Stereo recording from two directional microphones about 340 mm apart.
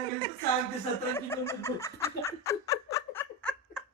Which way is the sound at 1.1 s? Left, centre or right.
Centre.